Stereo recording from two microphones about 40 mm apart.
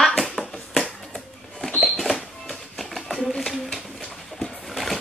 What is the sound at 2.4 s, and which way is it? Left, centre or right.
Music, centre.